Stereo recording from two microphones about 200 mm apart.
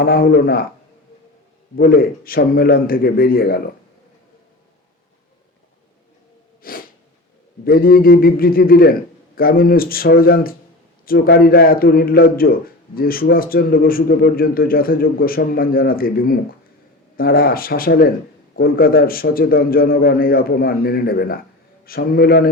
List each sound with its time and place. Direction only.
0.0 s a man's voice: 50° left (ahead or behind)
1.8 s a man's voice: 45° left (ahead or behind)
6.6 s sneeze: 45° left (ahead or behind)
7.6 s a man's voice: 45° left (ahead or behind)